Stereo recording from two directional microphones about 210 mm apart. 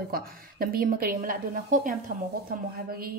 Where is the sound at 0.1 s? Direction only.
45° right (ahead or behind).